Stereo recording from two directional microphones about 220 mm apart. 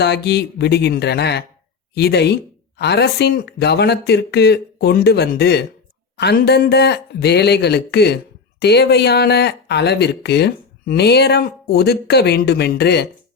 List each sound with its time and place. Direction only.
0.0 s speech: 50° left (ahead or behind)